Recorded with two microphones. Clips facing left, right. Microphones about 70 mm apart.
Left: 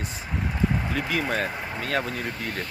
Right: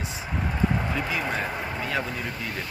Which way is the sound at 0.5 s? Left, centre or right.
Centre.